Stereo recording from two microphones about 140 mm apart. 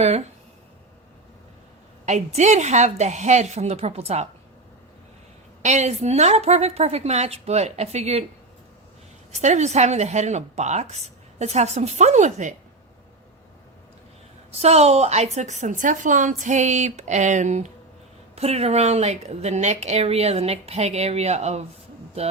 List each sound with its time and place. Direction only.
2.0 s a woman's voice: 55° right (ahead or behind)
5.6 s speech: 55° right (ahead or behind)
9.3 s speech: 55° right (ahead or behind)
14.5 s a woman's voice: 50° right (ahead or behind)